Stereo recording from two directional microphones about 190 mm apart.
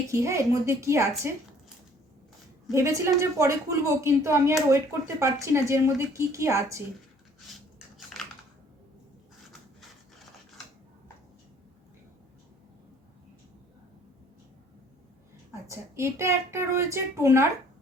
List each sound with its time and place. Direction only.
0.1 s speech: 15° right (ahead or behind)
2.7 s speech: 15° right (ahead or behind)
15.6 s speech: 15° right (ahead or behind)